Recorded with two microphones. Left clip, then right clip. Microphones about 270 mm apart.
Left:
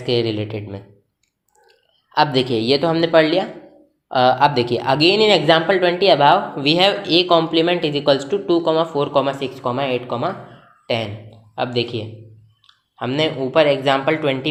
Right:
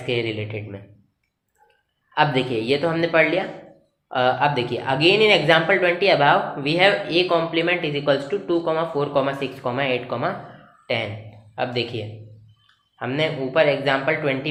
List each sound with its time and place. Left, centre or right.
0.0 s speech: left
2.1 s speech: left
13.1 s speech: left